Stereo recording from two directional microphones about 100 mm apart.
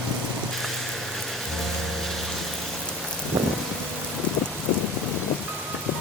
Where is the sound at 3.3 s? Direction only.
25° right (ahead or behind).